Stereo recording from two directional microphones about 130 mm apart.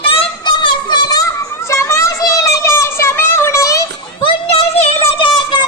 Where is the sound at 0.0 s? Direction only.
45° left (ahead or behind); by 3.8 s 25° left (ahead or behind).